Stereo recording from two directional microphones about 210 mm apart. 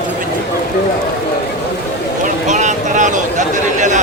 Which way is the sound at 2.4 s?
35° right (ahead or behind).